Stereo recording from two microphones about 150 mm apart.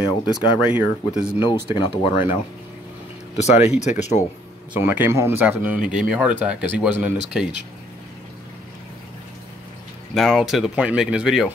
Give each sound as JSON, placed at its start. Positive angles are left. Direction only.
{"t": 0.0, "sound": "speech", "side_deg": 25}
{"t": 0.7, "sound": "speech", "side_deg": -10}
{"t": 1.4, "sound": "speech", "side_deg": 30}
{"t": 3.3, "sound": "speech", "side_deg": 45}
{"t": 4.7, "sound": "speech", "side_deg": -15}
{"t": 10.1, "sound": "speech", "side_deg": 0}